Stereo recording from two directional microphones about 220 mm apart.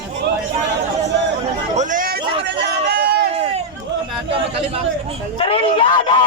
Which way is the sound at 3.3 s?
25° right (ahead or behind).